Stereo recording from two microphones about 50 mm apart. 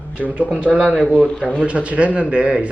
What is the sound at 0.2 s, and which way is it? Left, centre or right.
Speech, right.